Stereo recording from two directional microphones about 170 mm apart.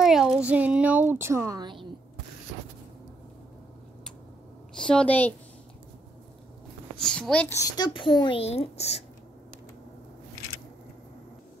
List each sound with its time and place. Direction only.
0.0 s a child's voice: centre (ahead or behind); by 1.9 s 25° right (ahead or behind)
4.7 s a woman's voice: 5° left (ahead or behind)
7.0 s a child's voice: 5° left (ahead or behind)
7.7 s speech: 25° left (ahead or behind)